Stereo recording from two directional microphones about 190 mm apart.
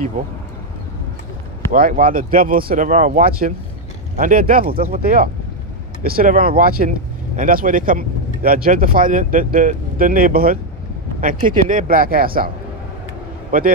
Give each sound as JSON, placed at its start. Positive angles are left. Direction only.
{"t": 1.7, "sound": "speech", "side_deg": -45}
{"t": 13.5, "sound": "speech", "side_deg": -45}